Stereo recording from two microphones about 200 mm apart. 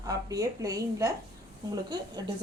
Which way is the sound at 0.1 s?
15° right (ahead or behind).